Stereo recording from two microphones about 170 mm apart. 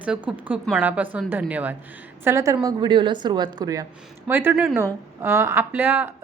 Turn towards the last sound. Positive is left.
turn(degrees=-10)  # may be behind; listen again after turning